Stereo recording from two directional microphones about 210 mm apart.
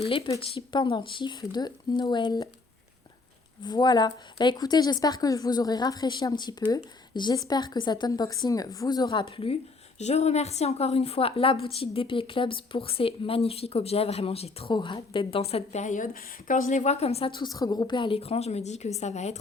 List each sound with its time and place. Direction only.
0.0 s a woman's voice: 25° left (ahead or behind)
3.6 s a woman's voice: 20° left (ahead or behind)